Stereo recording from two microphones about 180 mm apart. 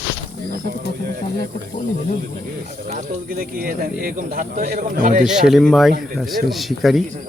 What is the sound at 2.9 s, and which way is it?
Speech, 40° right (ahead or behind).